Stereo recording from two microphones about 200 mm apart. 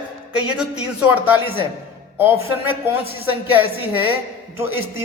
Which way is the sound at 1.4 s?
25° left (ahead or behind).